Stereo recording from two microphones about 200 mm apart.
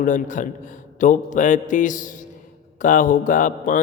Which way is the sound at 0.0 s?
40° left (ahead or behind).